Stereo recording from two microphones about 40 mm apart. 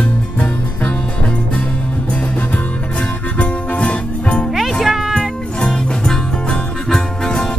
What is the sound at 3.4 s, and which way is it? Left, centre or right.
Music, left.